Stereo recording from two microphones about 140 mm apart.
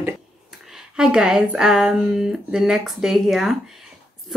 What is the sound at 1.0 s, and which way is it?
Speech, 5° right (ahead or behind).